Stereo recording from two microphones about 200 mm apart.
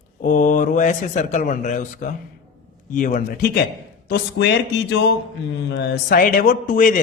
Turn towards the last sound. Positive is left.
turn(degrees=45)  # may be behind; listen again after turning